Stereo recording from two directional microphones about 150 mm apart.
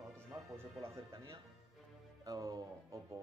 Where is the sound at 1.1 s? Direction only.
35° right (ahead or behind).